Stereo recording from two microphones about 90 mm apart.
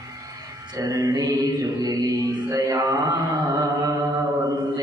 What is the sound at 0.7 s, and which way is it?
Mantra, 40° right (ahead or behind).